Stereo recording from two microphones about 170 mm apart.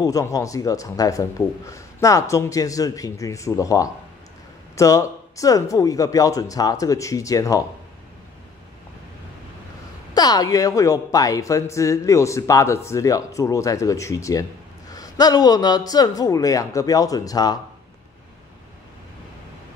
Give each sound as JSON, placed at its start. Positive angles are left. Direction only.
{"t": 0.0, "sound": "speech", "side_deg": 20}
{"t": 10.1, "sound": "speech", "side_deg": 25}